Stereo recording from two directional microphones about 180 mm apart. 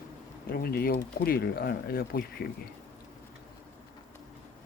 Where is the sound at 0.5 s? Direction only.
55° left (ahead or behind).